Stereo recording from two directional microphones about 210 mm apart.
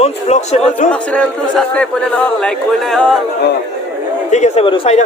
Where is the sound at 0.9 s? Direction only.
5° left (ahead or behind).